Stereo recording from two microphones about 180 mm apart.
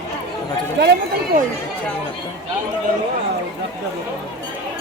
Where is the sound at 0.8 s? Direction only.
70° right (ahead or behind).